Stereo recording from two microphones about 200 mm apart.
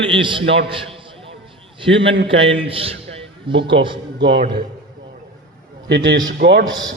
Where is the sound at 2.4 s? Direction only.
30° right (ahead or behind).